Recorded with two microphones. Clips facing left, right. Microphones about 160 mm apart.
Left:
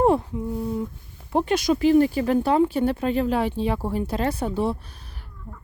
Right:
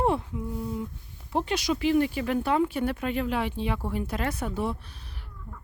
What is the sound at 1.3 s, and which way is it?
Speech, 50° left (ahead or behind).